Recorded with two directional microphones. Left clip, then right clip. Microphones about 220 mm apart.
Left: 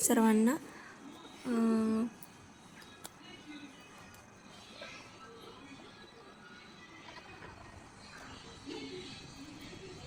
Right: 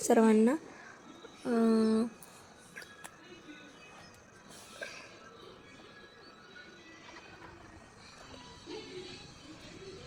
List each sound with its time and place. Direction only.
0.0 s speech: 10° right (ahead or behind)